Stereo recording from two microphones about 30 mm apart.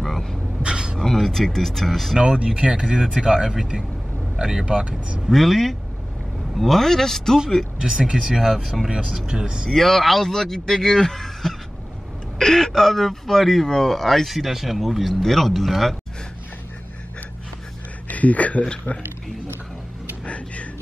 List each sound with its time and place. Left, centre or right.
0.6 s a sound: right
0.9 s speech: centre
2.4 s speech: right
3.4 s speech: right
4.6 s speech: right
5.3 s speech: centre
7.8 s speech: right
9.7 s speech: centre
14.3 s speech: centre
18.0 s speech: left
18.9 s speech: left
20.2 s a sound: left